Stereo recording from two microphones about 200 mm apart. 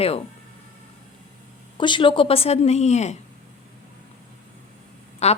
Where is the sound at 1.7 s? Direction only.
25° left (ahead or behind).